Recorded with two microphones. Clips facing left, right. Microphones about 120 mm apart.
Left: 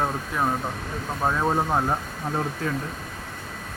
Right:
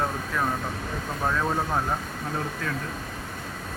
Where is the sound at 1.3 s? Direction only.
20° left (ahead or behind).